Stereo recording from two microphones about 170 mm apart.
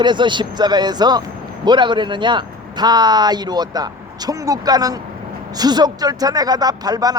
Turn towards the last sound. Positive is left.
turn(degrees=-20)  # may be behind; listen again after turning